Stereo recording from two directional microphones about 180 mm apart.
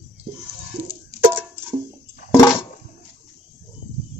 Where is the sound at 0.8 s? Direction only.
10° right (ahead or behind).